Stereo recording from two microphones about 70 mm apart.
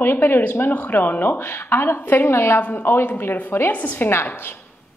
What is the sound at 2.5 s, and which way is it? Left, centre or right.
A woman's voice, left.